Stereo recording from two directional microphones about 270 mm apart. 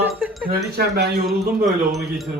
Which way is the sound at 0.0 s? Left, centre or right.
Centre.